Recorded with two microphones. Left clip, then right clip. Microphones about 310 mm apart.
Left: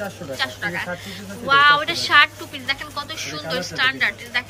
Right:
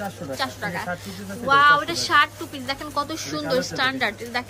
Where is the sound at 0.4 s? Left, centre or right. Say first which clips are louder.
Left 3 dB; centre.